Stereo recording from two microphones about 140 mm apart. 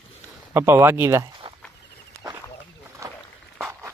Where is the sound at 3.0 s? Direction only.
20° right (ahead or behind).